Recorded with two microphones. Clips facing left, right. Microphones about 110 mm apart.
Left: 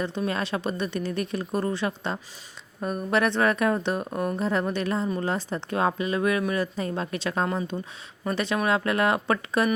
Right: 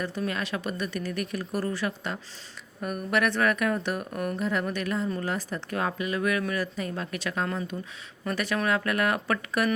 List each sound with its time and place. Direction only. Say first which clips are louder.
0.0 s a woman's voice: left 3 dB; 25° left (ahead or behind)